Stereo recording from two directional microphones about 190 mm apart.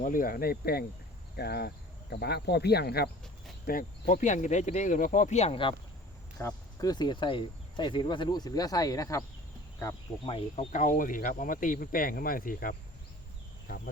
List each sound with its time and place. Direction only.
0.0 s speech: 45° left (ahead or behind); by 9.2 s 15° left (ahead or behind)
10.2 s speech: 30° left (ahead or behind); by 13.9 s 50° left (ahead or behind)